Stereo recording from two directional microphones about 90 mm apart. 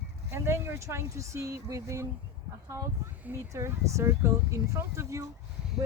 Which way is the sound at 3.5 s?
35° right (ahead or behind).